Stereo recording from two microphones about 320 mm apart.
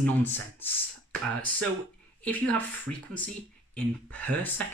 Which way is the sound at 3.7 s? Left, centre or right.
Centre.